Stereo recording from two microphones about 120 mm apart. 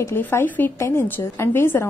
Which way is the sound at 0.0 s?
20° left (ahead or behind).